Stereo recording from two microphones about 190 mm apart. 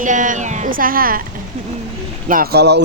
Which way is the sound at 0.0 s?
40° right (ahead or behind).